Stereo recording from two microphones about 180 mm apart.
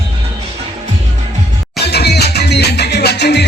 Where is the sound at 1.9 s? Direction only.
65° left (ahead or behind).